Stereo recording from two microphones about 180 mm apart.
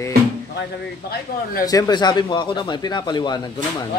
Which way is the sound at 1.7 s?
20° left (ahead or behind).